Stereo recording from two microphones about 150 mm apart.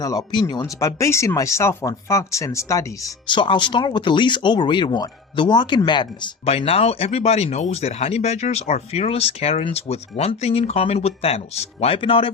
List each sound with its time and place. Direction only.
0.0 s speech: 25° left (ahead or behind)
3.2 s speech: 30° left (ahead or behind)
6.4 s speech: 40° left (ahead or behind)